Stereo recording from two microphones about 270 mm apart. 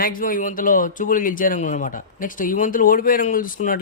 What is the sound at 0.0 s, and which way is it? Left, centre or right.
Speech, left.